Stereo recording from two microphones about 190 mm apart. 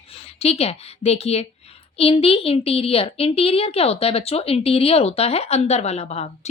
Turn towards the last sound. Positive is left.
turn(degrees=35)  # may be behind; listen again after turning